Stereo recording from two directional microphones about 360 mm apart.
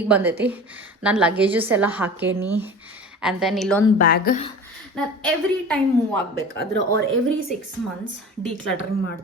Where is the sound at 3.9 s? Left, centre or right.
Left.